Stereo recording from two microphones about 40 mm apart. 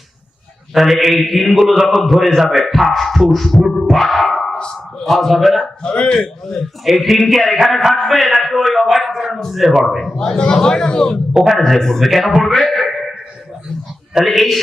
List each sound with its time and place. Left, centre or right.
0.7 s speech: centre
3.8 s music: centre
5.0 s speech: centre
5.8 s a man's voice: left
6.8 s speech: centre
10.2 s a man's voice: left
11.5 s speech: centre
14.3 s speech: centre